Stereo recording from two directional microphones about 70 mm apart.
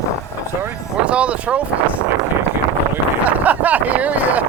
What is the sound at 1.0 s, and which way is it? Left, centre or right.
Speech, centre.